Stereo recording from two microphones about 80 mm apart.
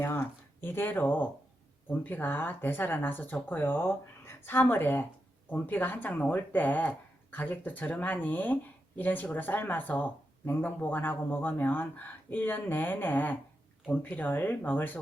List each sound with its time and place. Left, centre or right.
0.0 s speech: left